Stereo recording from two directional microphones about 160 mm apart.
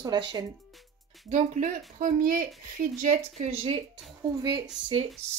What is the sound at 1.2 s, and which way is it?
Speech, 50° right (ahead or behind).